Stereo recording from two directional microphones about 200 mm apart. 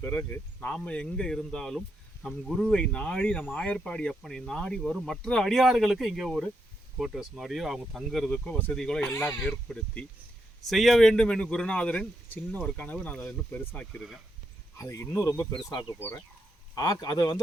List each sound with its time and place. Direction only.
0.0 s speech: 10° left (ahead or behind)
9.0 s speech: 15° left (ahead or behind)
14.8 s speech: 15° left (ahead or behind)